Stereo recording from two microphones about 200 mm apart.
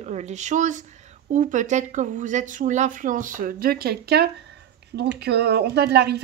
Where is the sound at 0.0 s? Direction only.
35° right (ahead or behind).